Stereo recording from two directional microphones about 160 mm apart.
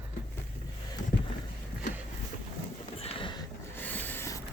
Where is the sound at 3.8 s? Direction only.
10° left (ahead or behind).